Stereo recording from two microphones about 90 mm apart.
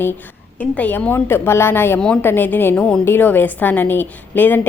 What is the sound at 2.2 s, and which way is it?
Speech, 25° left (ahead or behind).